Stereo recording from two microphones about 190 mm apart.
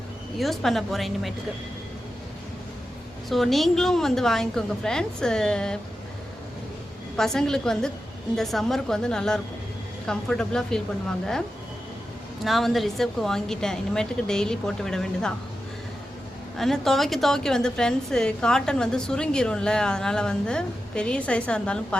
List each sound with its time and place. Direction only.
0.3 s a woman's voice: centre (ahead or behind)
3.2 s a woman's voice: centre (ahead or behind)
7.2 s a woman's voice: centre (ahead or behind)
12.5 s a woman's voice: centre (ahead or behind)
16.6 s a woman's voice: centre (ahead or behind)